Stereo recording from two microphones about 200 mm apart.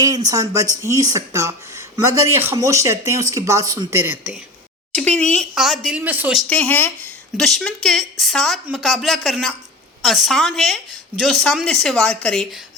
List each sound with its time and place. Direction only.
0.3 s speech: 15° right (ahead or behind)
4.9 s a woman's voice: 5° left (ahead or behind)
6.5 s a woman's voice: 10° left (ahead or behind)